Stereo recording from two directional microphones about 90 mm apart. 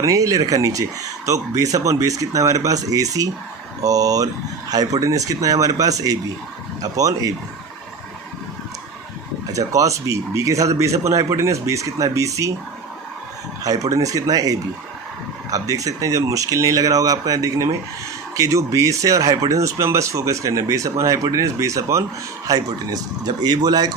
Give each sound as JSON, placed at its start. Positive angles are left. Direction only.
{"t": 0.0, "sound": "speech", "side_deg": -40}
{"t": 9.5, "sound": "speech", "side_deg": -40}
{"t": 13.7, "sound": "speech", "side_deg": -40}